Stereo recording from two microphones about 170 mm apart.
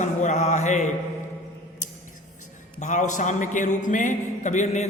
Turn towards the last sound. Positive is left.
turn(degrees=40)  # may be behind; listen again after turning